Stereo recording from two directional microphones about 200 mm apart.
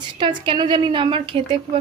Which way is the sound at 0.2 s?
25° right (ahead or behind).